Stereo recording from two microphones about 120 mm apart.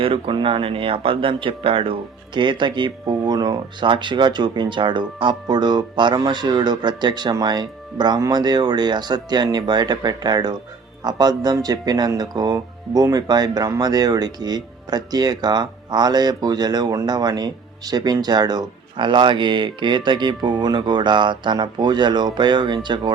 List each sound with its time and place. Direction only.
0.0 s speech: 45° right (ahead or behind)